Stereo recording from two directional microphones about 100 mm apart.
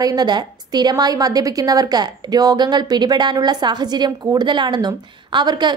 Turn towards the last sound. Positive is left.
turn(degrees=-50)  # may be behind; listen again after turning